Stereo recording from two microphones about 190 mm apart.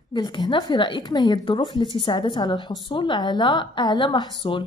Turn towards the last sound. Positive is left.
turn(degrees=25)  # may be behind; listen again after turning